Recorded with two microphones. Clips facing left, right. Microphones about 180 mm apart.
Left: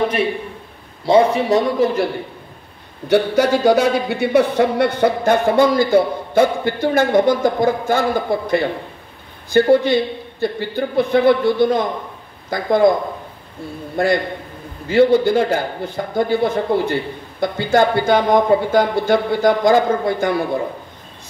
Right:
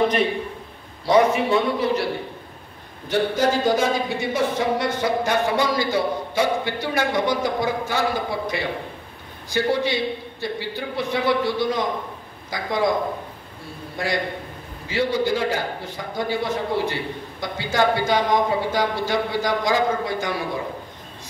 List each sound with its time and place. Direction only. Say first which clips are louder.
1.0 s a man's voice: left 4 dB; 25° left (ahead or behind)
1.5 s speech: left 4 dB; 45° left (ahead or behind)
3.1 s speech: left 6 dB; 70° left (ahead or behind)
13.9 s a man's voice: left 8 dB; 55° left (ahead or behind)